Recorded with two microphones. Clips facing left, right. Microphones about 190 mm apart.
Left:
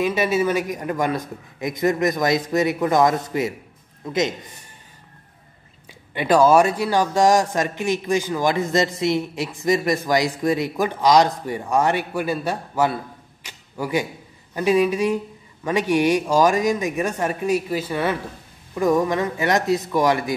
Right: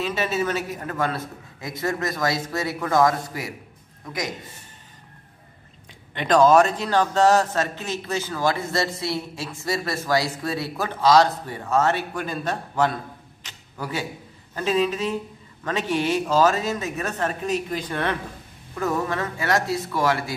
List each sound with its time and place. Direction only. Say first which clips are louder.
0.0 s a man's voice: left 5 dB; 10° left (ahead or behind)
5.9 s speech: left 3 dB; 10° left (ahead or behind)